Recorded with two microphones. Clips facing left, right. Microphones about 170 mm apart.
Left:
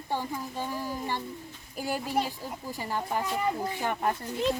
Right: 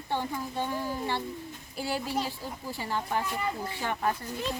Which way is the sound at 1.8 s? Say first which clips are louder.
Even; 45° left (ahead or behind).